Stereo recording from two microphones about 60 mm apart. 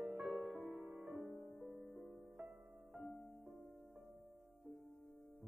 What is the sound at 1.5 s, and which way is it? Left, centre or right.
Music, right.